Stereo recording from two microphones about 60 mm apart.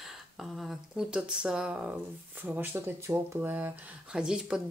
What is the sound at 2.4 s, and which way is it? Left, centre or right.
Speech, right.